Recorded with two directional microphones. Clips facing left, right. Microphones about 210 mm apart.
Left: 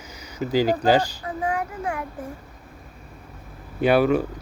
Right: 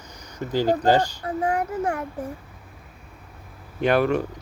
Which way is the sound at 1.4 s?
40° right (ahead or behind).